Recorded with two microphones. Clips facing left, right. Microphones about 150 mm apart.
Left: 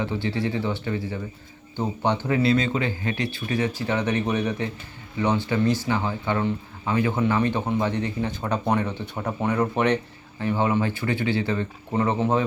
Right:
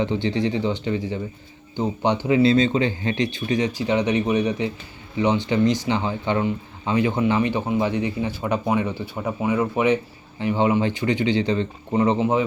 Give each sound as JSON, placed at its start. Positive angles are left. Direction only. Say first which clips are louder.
{"t": 0.0, "sound": "speech", "louder": "right 4 dB", "side_deg": -20}
{"t": 2.4, "sound": "speech", "louder": "right 5 dB", "side_deg": -25}
{"t": 10.4, "sound": "speech", "louder": "right 3 dB", "side_deg": -15}